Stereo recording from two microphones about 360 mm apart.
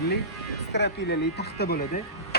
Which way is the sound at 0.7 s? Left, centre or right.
Left.